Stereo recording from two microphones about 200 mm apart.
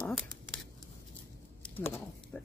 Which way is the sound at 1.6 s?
10° left (ahead or behind).